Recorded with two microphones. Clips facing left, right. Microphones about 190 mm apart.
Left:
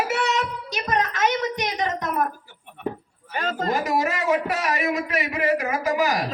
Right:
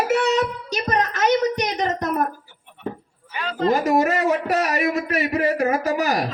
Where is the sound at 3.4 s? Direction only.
45° left (ahead or behind).